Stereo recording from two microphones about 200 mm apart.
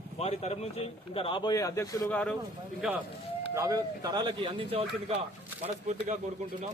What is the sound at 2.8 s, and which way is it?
Speech, 5° right (ahead or behind).